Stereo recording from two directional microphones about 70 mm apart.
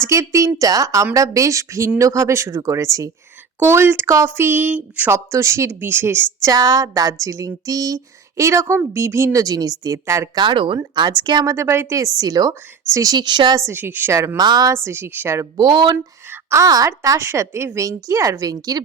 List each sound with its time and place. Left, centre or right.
0.0 s speech: right
3.6 s a woman's voice: right
5.1 s a woman's voice: right
6.5 s speech: right
11.2 s speech: right
11.4 s speech: right
11.9 s speech: right
13.7 s a woman's voice: right
14.3 s speech: right
14.7 s a woman's voice: right
15.5 s speech: right
16.3 s a sound: right
16.6 s speech: right